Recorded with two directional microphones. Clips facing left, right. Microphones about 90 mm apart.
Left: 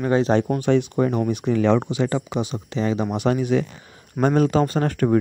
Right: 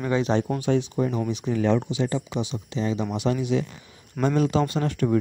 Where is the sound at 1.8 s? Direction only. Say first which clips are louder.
Left 3 dB; 60° left (ahead or behind).